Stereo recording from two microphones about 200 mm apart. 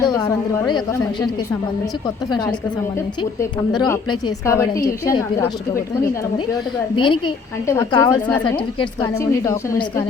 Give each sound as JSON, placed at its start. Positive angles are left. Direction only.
{"t": 0.0, "sound": "a woman's voice", "side_deg": 15}
{"t": 2.3, "sound": "a woman's voice", "side_deg": 20}
{"t": 3.8, "sound": "a woman's voice", "side_deg": 15}
{"t": 6.9, "sound": "a woman's voice", "side_deg": 25}